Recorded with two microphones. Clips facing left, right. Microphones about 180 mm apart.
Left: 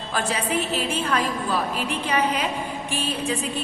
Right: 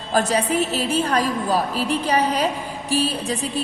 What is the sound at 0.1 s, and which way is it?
A woman's voice, 40° right (ahead or behind).